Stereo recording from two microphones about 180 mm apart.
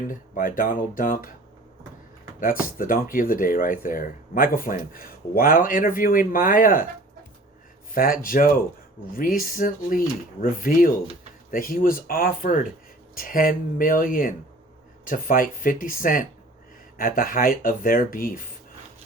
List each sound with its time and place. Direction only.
0.1 s speech: 50° left (ahead or behind)
2.4 s speech: 50° left (ahead or behind)
7.9 s speech: 50° left (ahead or behind)